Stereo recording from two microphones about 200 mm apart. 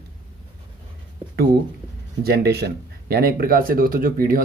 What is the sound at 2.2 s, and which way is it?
Speech, 55° right (ahead or behind).